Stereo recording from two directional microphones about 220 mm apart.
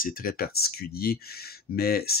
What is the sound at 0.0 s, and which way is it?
Speech, 40° left (ahead or behind).